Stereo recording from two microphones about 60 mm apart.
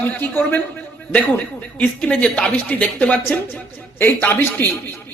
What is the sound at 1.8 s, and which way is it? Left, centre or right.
A man's voice, centre.